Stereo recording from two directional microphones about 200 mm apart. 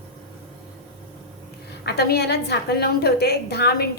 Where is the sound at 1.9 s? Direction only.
55° left (ahead or behind).